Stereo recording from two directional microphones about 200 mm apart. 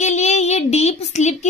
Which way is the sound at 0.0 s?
35° left (ahead or behind).